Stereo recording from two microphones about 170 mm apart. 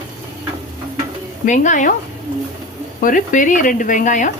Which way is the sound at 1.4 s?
45° left (ahead or behind).